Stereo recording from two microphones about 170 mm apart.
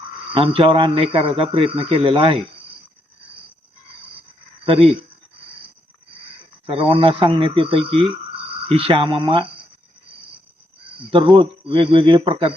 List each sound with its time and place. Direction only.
0.3 s a man's voice: 30° right (ahead or behind)
4.6 s speech: 35° right (ahead or behind)
6.7 s a man's voice: 30° right (ahead or behind)
11.1 s a man's voice: 30° right (ahead or behind)